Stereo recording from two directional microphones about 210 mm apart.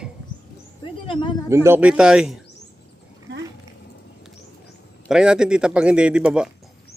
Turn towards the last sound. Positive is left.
turn(degrees=-5)  # may be behind; listen again after turning